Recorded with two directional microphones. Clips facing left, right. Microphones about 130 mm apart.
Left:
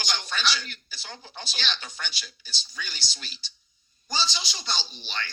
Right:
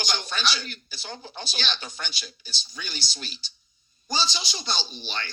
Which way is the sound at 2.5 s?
45° right (ahead or behind).